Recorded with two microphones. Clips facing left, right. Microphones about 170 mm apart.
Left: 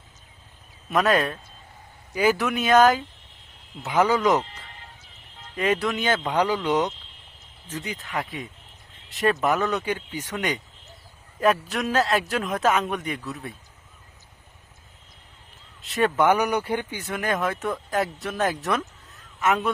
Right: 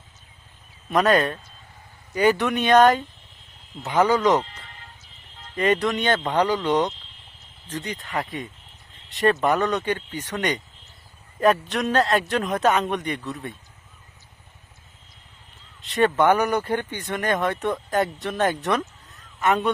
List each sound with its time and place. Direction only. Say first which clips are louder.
0.9 s speech: right 2 dB; centre (ahead or behind)
5.5 s speech: right 2 dB; centre (ahead or behind)
15.8 s speech: right 2 dB; centre (ahead or behind)